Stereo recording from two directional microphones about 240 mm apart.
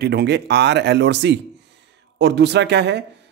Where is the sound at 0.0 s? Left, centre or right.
Right.